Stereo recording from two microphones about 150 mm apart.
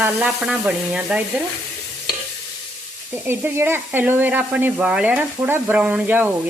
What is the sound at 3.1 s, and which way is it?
Speech, 10° right (ahead or behind).